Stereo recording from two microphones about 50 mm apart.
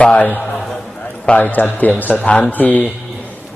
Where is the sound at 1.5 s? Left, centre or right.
Left.